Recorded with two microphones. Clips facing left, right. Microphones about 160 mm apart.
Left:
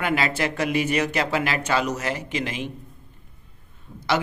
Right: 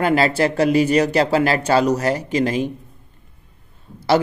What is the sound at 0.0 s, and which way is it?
A man's voice, 35° right (ahead or behind).